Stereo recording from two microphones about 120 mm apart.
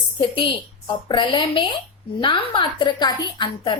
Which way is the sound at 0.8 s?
40° left (ahead or behind).